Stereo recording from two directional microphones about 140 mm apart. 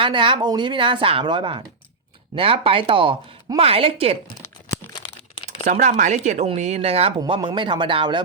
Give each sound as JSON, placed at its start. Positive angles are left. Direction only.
{"t": 0.0, "sound": "a woman's voice", "side_deg": -35}
{"t": 5.6, "sound": "speech", "side_deg": -60}
{"t": 7.2, "sound": "speech", "side_deg": -35}